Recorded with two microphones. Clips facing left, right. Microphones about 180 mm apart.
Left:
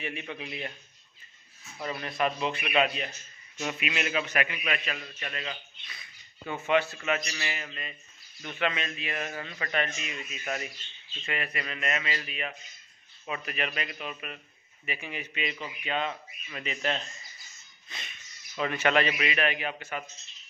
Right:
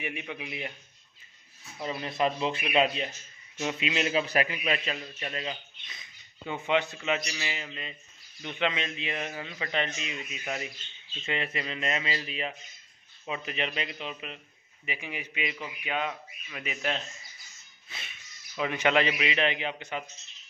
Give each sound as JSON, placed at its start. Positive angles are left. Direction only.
{"t": 0.0, "sound": "speech", "side_deg": -15}
{"t": 1.8, "sound": "a man's voice", "side_deg": -20}
{"t": 17.8, "sound": "a sound", "side_deg": -5}
{"t": 18.7, "sound": "speech", "side_deg": -15}